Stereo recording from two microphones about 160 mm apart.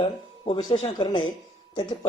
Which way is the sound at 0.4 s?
35° left (ahead or behind).